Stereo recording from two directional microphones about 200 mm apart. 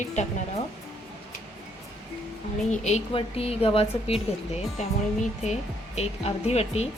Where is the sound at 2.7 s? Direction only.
35° left (ahead or behind).